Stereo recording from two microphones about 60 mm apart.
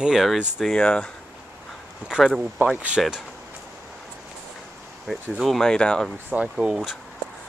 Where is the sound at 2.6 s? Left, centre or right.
Centre.